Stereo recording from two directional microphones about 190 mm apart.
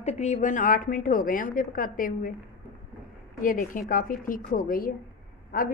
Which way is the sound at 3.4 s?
45° left (ahead or behind).